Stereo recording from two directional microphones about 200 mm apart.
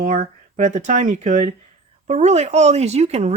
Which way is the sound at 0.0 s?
45° right (ahead or behind).